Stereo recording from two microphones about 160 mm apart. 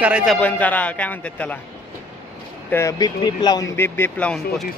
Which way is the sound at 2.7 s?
20° left (ahead or behind).